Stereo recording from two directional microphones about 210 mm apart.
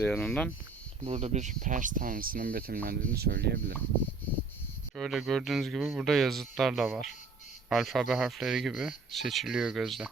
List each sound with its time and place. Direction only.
0.0 s speech: 5° left (ahead or behind)
1.0 s speech: 30° right (ahead or behind); by 3.6 s 50° right (ahead or behind)
4.9 s speech: centre (ahead or behind)